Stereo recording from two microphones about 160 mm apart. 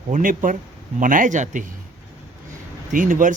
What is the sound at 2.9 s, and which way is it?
Speech, 55° right (ahead or behind).